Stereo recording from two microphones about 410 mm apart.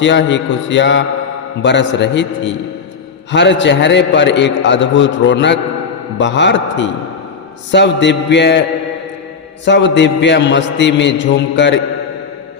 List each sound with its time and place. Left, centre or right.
0.0 s a man's voice: left
9.6 s a man's voice: left